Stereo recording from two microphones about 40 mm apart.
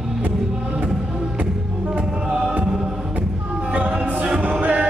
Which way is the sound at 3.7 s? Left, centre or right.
Right.